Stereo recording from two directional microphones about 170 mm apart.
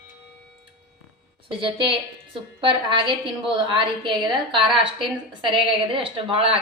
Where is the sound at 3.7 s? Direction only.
30° right (ahead or behind).